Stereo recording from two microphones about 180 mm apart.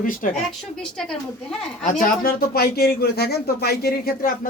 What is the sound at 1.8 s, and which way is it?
A man's voice, 50° left (ahead or behind).